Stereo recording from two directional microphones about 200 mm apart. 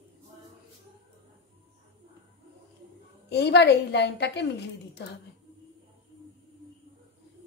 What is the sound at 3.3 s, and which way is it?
A woman's voice, 55° left (ahead or behind).